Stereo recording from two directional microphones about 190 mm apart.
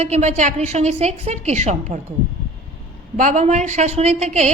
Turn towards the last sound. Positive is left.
turn(degrees=-35)  # may be behind; listen again after turning